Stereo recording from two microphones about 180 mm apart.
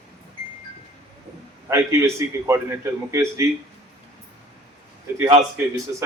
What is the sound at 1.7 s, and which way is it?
A man's voice, 15° right (ahead or behind).